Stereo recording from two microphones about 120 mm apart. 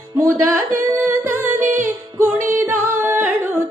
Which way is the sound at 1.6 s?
90° right.